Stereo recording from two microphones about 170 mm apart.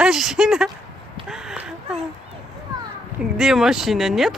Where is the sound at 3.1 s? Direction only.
5° right (ahead or behind).